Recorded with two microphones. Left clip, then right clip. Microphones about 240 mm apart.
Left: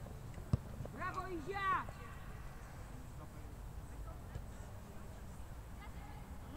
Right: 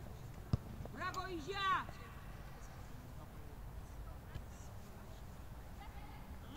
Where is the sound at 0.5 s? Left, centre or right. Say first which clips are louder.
Left 1 dB; centre.